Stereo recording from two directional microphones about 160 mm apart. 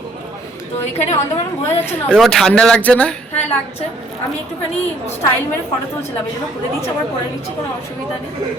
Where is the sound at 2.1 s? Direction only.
Centre (ahead or behind).